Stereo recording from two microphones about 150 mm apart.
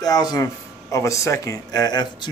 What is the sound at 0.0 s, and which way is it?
Speech, 25° left (ahead or behind).